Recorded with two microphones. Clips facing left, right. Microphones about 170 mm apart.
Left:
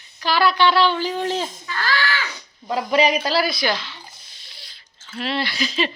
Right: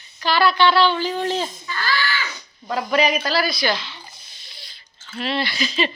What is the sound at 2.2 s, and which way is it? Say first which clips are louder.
Speech: even; 35° left (ahead or behind).